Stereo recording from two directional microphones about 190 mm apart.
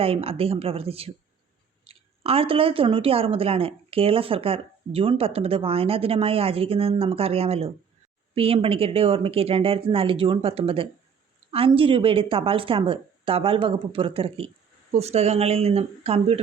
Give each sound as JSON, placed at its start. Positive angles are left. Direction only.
{"t": 0.0, "sound": "speech", "side_deg": -30}